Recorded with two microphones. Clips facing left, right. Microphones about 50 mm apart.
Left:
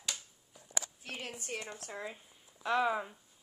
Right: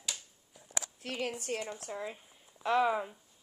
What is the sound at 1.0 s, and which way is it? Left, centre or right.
Speech, right.